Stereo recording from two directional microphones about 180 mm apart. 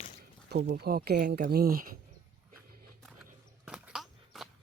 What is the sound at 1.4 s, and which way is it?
Speech, 55° right (ahead or behind).